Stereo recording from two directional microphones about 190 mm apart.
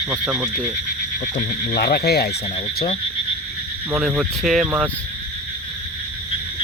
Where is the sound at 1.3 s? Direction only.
55° left (ahead or behind).